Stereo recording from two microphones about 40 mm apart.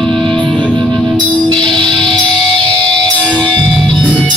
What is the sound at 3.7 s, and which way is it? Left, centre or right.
Music, centre.